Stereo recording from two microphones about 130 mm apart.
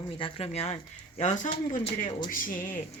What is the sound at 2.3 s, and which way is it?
Speech, 90° left.